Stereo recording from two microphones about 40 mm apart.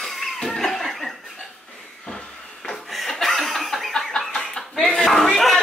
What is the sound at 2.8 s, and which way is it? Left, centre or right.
Chuckle, centre.